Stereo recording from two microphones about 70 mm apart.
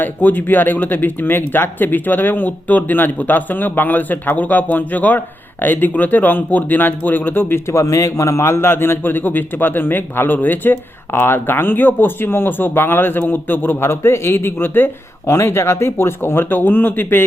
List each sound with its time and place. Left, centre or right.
0.0 s speech: left